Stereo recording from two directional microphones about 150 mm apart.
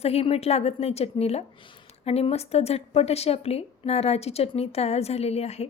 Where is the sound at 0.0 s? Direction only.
45° left (ahead or behind).